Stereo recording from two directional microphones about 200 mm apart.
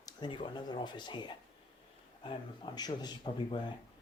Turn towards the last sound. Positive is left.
turn(degrees=20)  # may be behind; listen again after turning